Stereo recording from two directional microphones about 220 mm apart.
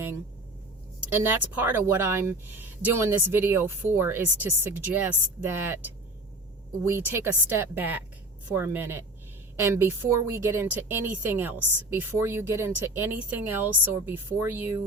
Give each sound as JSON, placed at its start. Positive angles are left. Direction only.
{"t": 1.1, "sound": "a woman's voice", "side_deg": -10}
{"t": 6.8, "sound": "a woman's voice", "side_deg": -10}
{"t": 11.6, "sound": "a woman's voice", "side_deg": -90}
{"t": 11.9, "sound": "a woman's voice", "side_deg": -10}